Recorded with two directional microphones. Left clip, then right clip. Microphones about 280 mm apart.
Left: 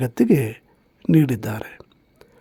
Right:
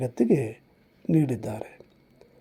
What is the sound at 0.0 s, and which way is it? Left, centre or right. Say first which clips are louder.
Speech: left 5 dB; left.